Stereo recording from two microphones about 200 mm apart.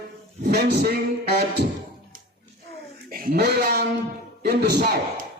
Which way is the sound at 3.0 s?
45° right (ahead or behind).